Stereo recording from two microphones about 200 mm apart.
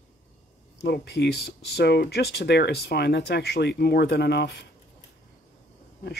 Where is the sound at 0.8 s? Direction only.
55° left (ahead or behind).